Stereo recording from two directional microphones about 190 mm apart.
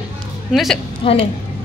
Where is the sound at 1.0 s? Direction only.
30° left (ahead or behind).